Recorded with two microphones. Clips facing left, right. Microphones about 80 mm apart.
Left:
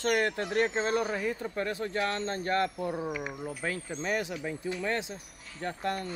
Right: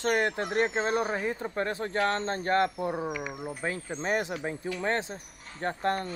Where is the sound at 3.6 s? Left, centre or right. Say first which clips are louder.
Right 2 dB; right.